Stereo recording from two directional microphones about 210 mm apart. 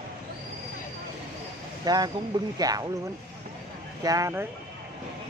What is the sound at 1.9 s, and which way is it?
Speech, 20° right (ahead or behind).